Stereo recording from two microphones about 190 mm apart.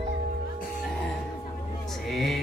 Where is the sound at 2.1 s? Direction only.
Centre (ahead or behind).